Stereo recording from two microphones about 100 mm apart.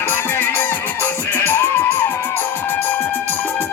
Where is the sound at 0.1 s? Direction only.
20° left (ahead or behind).